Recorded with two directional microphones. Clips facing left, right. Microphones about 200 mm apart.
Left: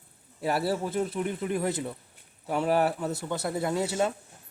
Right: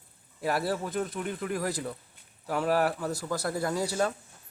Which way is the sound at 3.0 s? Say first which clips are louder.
Left 1 dB; 25° left (ahead or behind).